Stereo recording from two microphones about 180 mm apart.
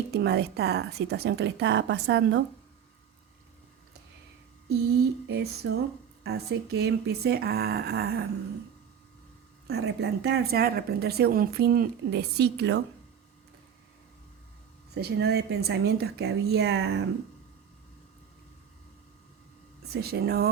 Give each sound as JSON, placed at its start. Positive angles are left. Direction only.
{"t": 0.1, "sound": "a woman's voice", "side_deg": -65}
{"t": 5.3, "sound": "speech", "side_deg": -60}
{"t": 9.6, "sound": "speech", "side_deg": -65}
{"t": 14.9, "sound": "speech", "side_deg": -65}
{"t": 19.9, "sound": "speech", "side_deg": -60}